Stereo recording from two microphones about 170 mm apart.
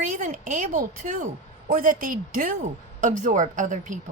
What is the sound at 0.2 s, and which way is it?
A woman's voice, 50° right (ahead or behind).